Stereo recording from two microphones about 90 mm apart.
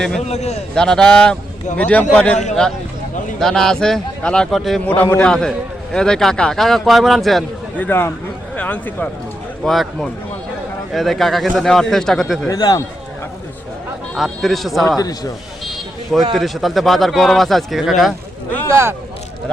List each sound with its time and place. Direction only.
0.7 s a man's voice: 5° left (ahead or behind)
7.8 s a man's voice: 25° left (ahead or behind)
9.6 s speech: centre (ahead or behind)
12.5 s speech: 45° left (ahead or behind)
14.2 s speech: centre (ahead or behind)
14.8 s speech: 45° left (ahead or behind)
16.3 s speech: centre (ahead or behind)
18.7 s speech: 30° right (ahead or behind)